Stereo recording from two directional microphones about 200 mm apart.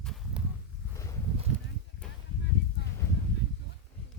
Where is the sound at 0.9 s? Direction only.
15° left (ahead or behind).